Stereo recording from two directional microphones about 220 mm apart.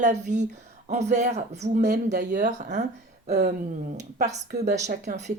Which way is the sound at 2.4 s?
35° right (ahead or behind).